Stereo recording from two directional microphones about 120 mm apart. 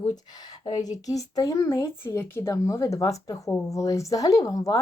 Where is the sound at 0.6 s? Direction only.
30° left (ahead or behind).